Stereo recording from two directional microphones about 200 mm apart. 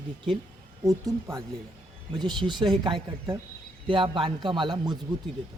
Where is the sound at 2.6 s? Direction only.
25° right (ahead or behind).